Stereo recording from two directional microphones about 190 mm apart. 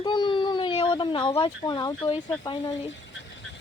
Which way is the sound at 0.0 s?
25° left (ahead or behind).